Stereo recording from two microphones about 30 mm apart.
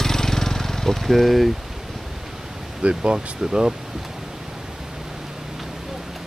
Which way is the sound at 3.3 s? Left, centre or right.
Centre.